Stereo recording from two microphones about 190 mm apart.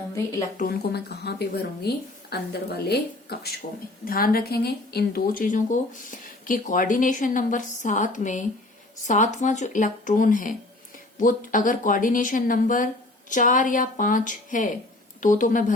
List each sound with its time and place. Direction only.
0.1 s a woman's voice: 15° left (ahead or behind)
0.5 s speech: 50° left (ahead or behind)